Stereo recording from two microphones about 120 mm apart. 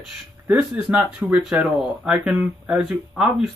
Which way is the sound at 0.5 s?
5° right (ahead or behind).